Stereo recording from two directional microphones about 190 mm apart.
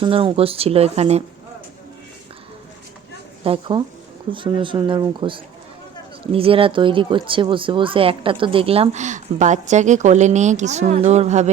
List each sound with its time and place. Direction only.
0.0 s speech: 25° right (ahead or behind)
3.4 s speech: 25° right (ahead or behind)